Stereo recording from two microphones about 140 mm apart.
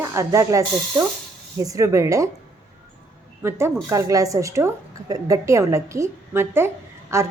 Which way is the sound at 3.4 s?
20° right (ahead or behind).